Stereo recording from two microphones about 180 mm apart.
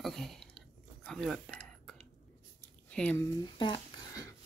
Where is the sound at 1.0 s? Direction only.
Centre (ahead or behind).